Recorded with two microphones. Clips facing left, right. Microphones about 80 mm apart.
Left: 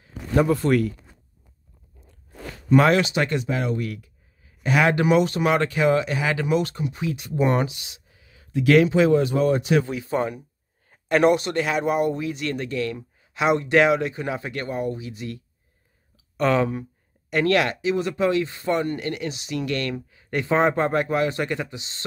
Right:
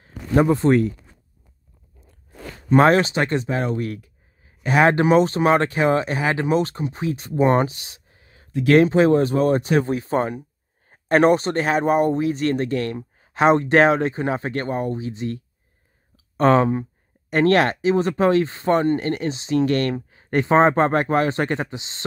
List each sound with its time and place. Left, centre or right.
0.3 s speech: right
2.7 s speech: right